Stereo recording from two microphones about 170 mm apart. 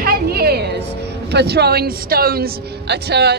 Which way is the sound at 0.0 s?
65° right (ahead or behind).